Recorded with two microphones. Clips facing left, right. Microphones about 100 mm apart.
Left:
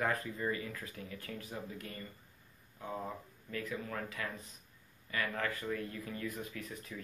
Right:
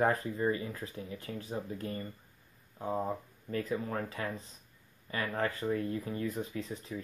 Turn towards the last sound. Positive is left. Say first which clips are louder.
# right 6 dB
turn(degrees=-25)  # may be behind; listen again after turning